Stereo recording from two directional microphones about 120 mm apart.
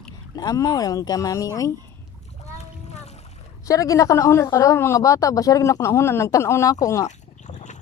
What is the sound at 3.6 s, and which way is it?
A woman's voice, 30° left (ahead or behind).